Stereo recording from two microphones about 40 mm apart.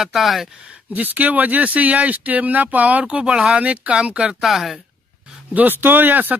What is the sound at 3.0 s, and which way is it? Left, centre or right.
Speech, right.